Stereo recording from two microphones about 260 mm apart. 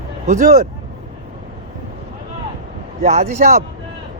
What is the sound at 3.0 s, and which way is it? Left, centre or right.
Speech, right.